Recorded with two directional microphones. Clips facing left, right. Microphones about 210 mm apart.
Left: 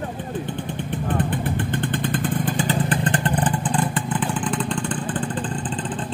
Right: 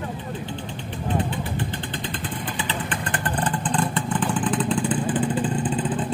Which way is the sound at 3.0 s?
30° left (ahead or behind).